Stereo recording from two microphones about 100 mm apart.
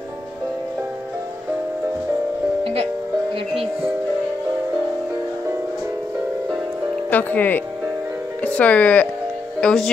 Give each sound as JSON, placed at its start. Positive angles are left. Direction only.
{"t": 2.6, "sound": "music", "side_deg": -70}
{"t": 7.1, "sound": "speech", "side_deg": 15}